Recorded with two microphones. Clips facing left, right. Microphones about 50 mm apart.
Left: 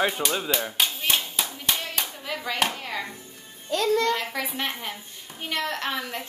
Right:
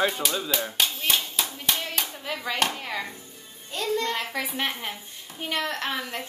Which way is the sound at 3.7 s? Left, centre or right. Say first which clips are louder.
Left 5 dB; left.